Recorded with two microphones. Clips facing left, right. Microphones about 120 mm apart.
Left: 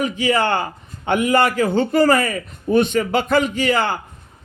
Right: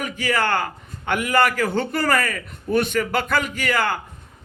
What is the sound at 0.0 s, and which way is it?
A man's voice, 20° left (ahead or behind).